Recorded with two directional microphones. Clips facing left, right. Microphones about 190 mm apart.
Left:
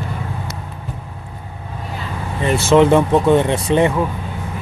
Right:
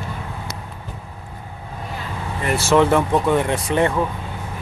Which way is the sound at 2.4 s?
20° left (ahead or behind).